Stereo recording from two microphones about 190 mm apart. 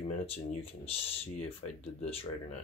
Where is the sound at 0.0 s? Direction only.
30° left (ahead or behind).